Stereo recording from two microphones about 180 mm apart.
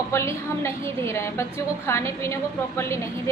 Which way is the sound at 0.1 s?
15° left (ahead or behind).